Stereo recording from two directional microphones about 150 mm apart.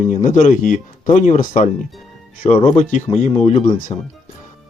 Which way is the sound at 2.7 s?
50° left (ahead or behind).